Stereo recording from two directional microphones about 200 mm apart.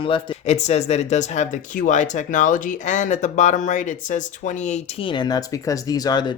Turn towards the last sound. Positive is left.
turn(degrees=20)  # may be behind; listen again after turning